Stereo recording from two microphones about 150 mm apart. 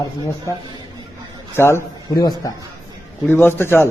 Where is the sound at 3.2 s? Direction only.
15° left (ahead or behind).